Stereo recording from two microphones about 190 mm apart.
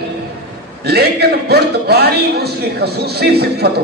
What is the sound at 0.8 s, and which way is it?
A man's voice, 55° right (ahead or behind).